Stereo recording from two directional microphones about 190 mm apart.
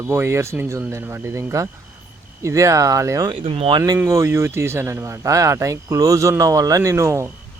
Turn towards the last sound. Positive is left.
turn(degrees=-15)  # may be behind; listen again after turning